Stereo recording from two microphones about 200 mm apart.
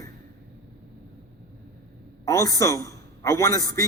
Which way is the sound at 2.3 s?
15° left (ahead or behind).